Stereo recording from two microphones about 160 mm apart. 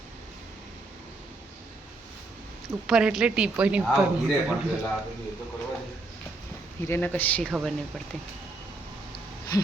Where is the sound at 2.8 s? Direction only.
5° right (ahead or behind).